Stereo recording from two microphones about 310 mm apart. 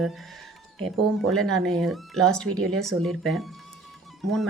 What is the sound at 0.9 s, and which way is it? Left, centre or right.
Speech, centre.